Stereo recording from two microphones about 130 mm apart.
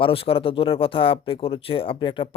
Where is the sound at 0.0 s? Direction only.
45° left (ahead or behind).